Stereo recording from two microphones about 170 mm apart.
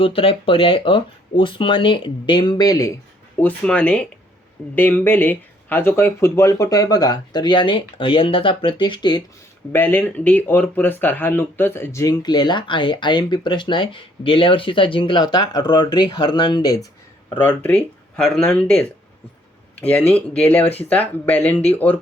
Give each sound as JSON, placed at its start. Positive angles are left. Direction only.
{"t": 0.0, "sound": "speech", "side_deg": 30}
{"t": 3.4, "sound": "speech", "side_deg": 5}
{"t": 9.7, "sound": "speech", "side_deg": 10}